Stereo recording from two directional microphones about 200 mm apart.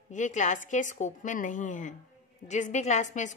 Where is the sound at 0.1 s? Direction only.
40° left (ahead or behind).